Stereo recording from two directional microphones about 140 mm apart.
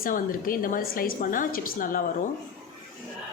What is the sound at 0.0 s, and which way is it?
A woman's voice, 85° left.